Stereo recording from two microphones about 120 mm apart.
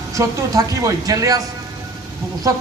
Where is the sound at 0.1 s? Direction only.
25° right (ahead or behind).